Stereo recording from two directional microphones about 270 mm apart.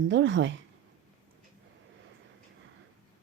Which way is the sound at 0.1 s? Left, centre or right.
Right.